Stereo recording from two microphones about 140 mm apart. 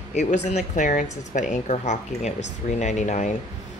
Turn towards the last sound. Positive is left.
turn(degrees=60)  # may be behind; listen again after turning